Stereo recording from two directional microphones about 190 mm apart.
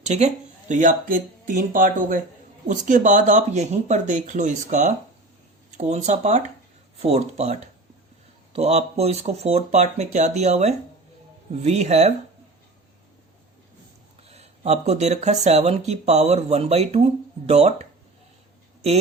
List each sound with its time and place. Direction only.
0.0 s speech: 35° right (ahead or behind)
8.5 s speech: 35° right (ahead or behind)
14.3 s speech: 35° right (ahead or behind)